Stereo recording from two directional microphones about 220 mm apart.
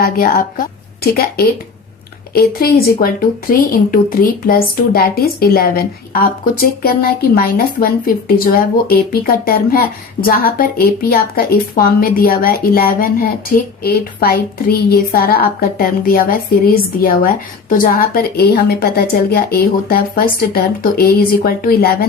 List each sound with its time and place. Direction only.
0.0 s a woman's voice: 40° left (ahead or behind)